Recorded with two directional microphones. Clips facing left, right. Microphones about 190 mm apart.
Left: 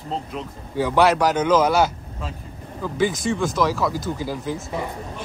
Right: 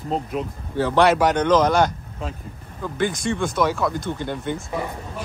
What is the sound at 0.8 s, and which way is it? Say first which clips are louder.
Speech: even; 15° left (ahead or behind).